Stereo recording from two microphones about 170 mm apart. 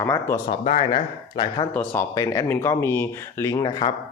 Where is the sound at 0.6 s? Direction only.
35° left (ahead or behind).